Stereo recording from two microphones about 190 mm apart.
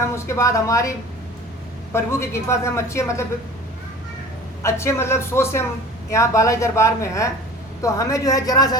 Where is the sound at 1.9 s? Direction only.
15° left (ahead or behind).